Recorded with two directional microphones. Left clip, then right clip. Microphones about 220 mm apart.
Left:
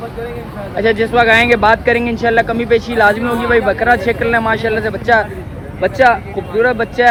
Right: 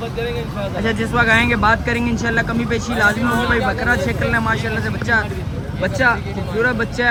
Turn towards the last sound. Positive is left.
turn(degrees=0)  # may be behind; listen again after turning